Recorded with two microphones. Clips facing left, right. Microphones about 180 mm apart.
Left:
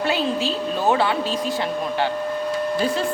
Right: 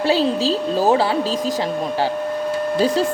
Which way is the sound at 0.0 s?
30° right (ahead or behind).